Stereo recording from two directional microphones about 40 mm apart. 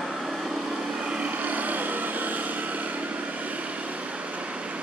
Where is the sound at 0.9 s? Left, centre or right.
Right.